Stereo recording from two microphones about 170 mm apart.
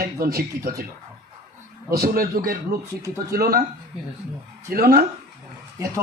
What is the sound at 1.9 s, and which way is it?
Speech, 65° right (ahead or behind).